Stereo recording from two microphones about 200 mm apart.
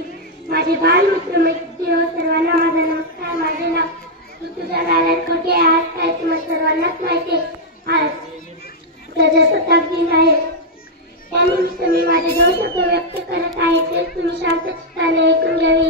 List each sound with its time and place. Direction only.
0.5 s a woman's voice: 55° right (ahead or behind)
3.3 s a sound: 55° right (ahead or behind)
4.7 s child singing: 50° right (ahead or behind)
7.8 s children playing: 55° right (ahead or behind)
9.1 s speech: 60° right (ahead or behind)
11.3 s a sound: 50° right (ahead or behind)
12.9 s child singing: 55° right (ahead or behind)